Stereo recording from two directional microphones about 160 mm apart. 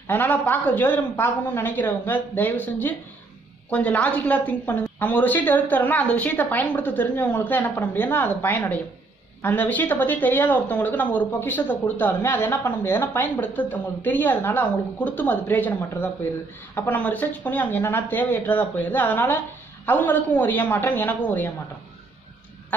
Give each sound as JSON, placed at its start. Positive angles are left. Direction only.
{"t": 0.1, "sound": "speech", "side_deg": 10}